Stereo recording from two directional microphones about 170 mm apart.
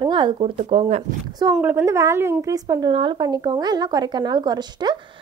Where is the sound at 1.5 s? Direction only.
15° right (ahead or behind).